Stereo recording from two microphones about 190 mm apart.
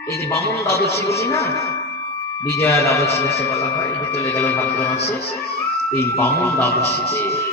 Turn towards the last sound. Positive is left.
turn(degrees=15)  # may be behind; listen again after turning